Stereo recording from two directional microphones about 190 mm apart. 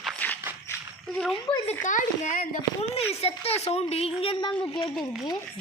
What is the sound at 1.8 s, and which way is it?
Speech, 40° left (ahead or behind).